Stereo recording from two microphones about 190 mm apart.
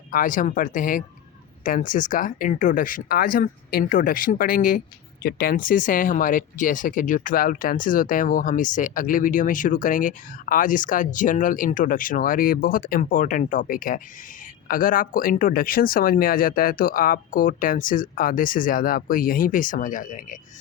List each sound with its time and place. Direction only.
0.1 s speech: 45° left (ahead or behind)